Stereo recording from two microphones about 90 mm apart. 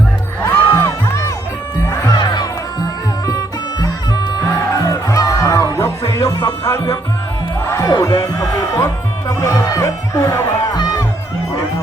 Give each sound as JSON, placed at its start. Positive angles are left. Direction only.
{"t": 0.4, "sound": "music", "side_deg": 30}
{"t": 2.1, "sound": "music", "side_deg": 50}
{"t": 10.8, "sound": "music", "side_deg": 50}